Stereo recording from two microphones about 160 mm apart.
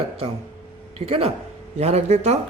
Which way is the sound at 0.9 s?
40° right (ahead or behind).